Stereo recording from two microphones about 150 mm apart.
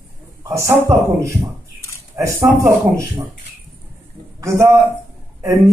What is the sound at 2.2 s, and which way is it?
Speech, 20° right (ahead or behind).